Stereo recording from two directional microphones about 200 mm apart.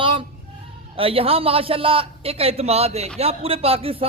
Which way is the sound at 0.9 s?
25° right (ahead or behind).